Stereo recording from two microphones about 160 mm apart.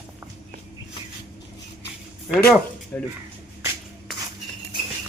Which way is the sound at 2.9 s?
15° left (ahead or behind).